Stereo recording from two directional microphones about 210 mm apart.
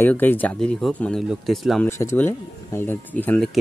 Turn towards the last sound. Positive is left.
turn(degrees=5)  # may be behind; listen again after turning